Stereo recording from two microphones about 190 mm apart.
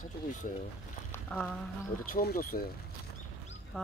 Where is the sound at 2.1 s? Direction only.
50° left (ahead or behind).